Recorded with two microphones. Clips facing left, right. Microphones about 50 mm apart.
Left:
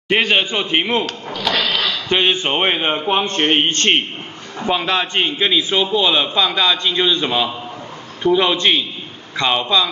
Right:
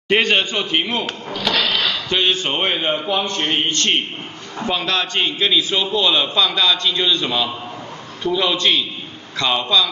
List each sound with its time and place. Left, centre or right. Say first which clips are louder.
0.1 s a man's voice: even; centre; by 1.0 s left
2.0 s a man's voice: left 5 dB; left
3.1 s a man's voice: left 4 dB; left
4.6 s a man's voice: left 3 dB; centre